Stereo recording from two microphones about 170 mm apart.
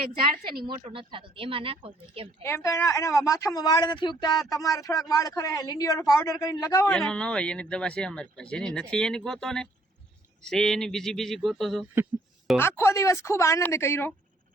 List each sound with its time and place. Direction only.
0.8 s speech: 35° right (ahead or behind)
2.4 s speech: 15° left (ahead or behind)
6.9 s speech: 5° left (ahead or behind)
12.5 s a woman's voice: 15° left (ahead or behind)